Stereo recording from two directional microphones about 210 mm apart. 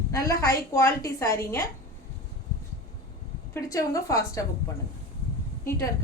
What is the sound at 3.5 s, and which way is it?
Speech, 15° left (ahead or behind).